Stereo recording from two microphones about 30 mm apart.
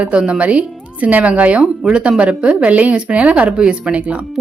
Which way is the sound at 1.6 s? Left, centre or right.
Right.